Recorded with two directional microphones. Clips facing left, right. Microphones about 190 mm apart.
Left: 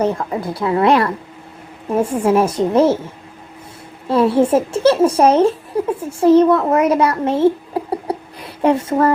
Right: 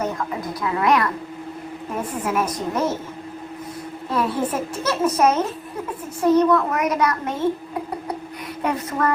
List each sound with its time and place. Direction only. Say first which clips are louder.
0.0 s a child's voice: left 7 dB; 30° left (ahead or behind)
4.1 s a child's voice: left 10 dB; 30° left (ahead or behind)